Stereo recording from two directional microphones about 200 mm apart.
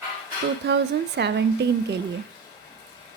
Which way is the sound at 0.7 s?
60° right (ahead or behind).